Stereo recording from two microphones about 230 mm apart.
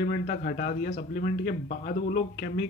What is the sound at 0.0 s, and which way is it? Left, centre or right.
A man's voice, left.